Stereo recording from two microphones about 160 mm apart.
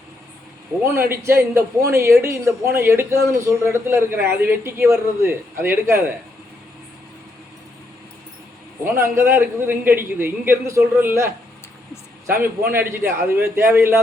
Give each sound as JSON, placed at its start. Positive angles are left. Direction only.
{"t": 0.9, "sound": "a man's voice", "side_deg": -15}
{"t": 8.8, "sound": "a man's voice", "side_deg": -15}
{"t": 12.4, "sound": "a man's voice", "side_deg": -15}